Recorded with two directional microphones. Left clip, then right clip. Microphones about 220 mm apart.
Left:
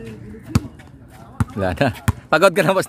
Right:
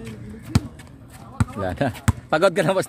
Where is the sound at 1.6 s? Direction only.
20° left (ahead or behind).